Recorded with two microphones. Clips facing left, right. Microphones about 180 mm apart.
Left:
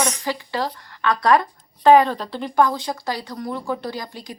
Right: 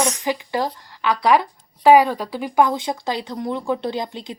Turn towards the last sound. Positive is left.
turn(degrees=-20)  # may be behind; listen again after turning